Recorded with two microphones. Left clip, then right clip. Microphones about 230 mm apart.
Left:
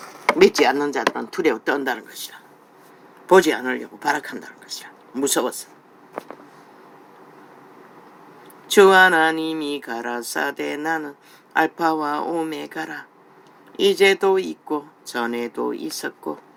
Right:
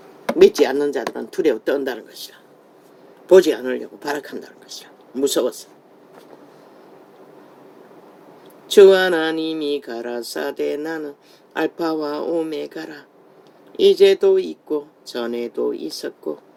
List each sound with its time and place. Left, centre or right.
0.3 s speech: left
8.7 s speech: left